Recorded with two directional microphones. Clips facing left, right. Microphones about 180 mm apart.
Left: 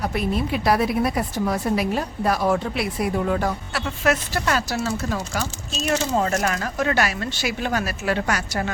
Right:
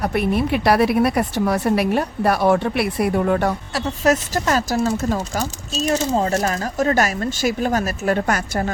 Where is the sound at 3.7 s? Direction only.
40° right (ahead or behind).